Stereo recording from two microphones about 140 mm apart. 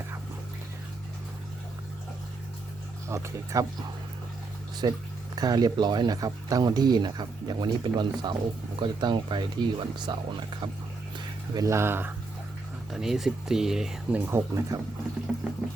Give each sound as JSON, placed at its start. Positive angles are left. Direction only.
{"t": 3.1, "sound": "speech", "side_deg": -25}
{"t": 4.8, "sound": "speech", "side_deg": -30}
{"t": 11.5, "sound": "speech", "side_deg": -20}
{"t": 12.9, "sound": "speech", "side_deg": -5}